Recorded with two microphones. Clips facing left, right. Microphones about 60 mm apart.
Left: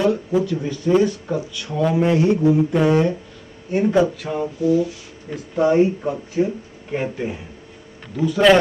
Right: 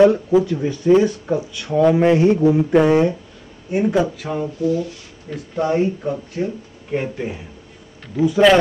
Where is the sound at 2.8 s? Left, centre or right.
Centre.